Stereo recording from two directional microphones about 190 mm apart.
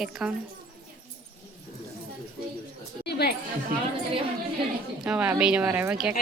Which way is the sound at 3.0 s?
55° left (ahead or behind).